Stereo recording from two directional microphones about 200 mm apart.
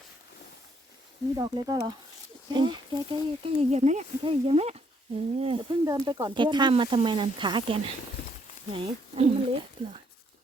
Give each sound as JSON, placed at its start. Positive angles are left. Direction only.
{"t": 1.4, "sound": "speech", "side_deg": -20}
{"t": 5.8, "sound": "speech", "side_deg": -15}